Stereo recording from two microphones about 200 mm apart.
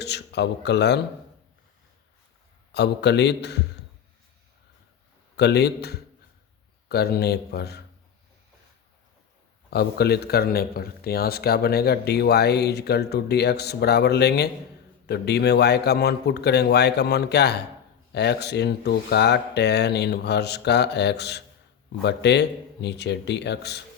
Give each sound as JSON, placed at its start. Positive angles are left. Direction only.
{"t": 0.0, "sound": "speech", "side_deg": 55}
{"t": 2.7, "sound": "speech", "side_deg": 55}
{"t": 5.4, "sound": "a man's voice", "side_deg": 55}
{"t": 9.6, "sound": "a man's voice", "side_deg": 55}